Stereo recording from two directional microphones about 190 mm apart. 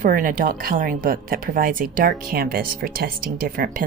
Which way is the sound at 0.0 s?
45° right (ahead or behind).